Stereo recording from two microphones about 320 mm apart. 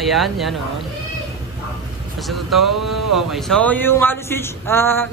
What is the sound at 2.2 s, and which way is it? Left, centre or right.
Speech, centre.